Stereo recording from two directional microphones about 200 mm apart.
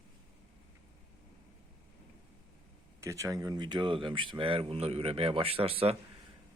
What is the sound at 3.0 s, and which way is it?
Speech, 15° right (ahead or behind).